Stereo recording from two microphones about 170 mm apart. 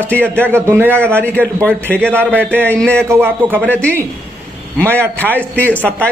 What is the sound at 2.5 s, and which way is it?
A man's voice, 10° right (ahead or behind).